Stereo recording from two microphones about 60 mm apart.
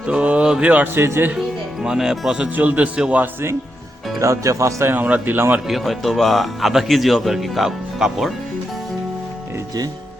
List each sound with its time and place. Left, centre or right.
0.0 s a sound: centre
0.5 s a man's voice: right
0.9 s speech: right
1.8 s speech: centre
2.6 s a man's voice: right
4.2 s speech: right
4.9 s a man's voice: right
5.6 s speech: centre